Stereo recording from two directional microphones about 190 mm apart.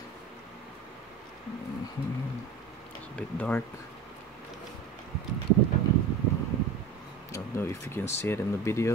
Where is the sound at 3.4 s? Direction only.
10° left (ahead or behind).